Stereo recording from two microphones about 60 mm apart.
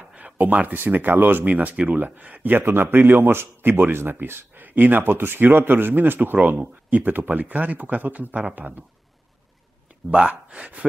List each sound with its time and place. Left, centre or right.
0.0 s a man's voice: right
10.1 s speech: centre